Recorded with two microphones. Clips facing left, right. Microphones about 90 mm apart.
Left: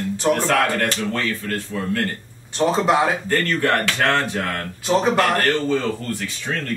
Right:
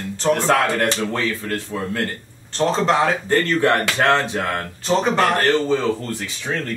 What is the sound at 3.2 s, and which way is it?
Speech, 20° right (ahead or behind).